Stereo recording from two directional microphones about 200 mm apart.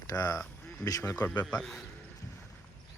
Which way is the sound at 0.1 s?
20° left (ahead or behind).